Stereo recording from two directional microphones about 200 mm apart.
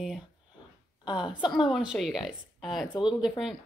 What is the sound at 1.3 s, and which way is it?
Speech, 25° left (ahead or behind).